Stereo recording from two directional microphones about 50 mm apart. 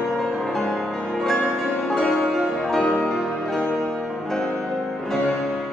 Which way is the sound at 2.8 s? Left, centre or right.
Left.